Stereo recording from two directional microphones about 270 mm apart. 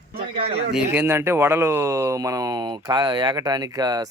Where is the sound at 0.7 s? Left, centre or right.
Centre.